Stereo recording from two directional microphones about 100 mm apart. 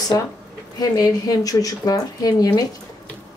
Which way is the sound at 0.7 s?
40° left (ahead or behind).